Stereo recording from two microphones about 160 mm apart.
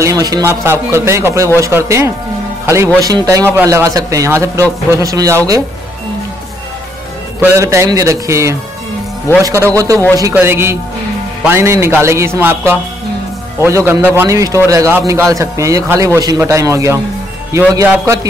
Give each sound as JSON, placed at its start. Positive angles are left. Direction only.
{"t": 0.0, "sound": "a sound", "side_deg": -20}
{"t": 0.7, "sound": "a man's voice", "side_deg": -15}
{"t": 7.3, "sound": "a man's voice", "side_deg": -15}